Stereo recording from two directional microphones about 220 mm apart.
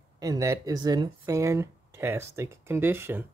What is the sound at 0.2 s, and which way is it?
Speech, 15° right (ahead or behind).